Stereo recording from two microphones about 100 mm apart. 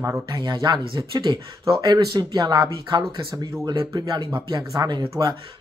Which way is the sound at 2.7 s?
55° right (ahead or behind).